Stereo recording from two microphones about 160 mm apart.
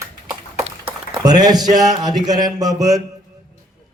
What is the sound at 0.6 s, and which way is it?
Speech, 35° right (ahead or behind).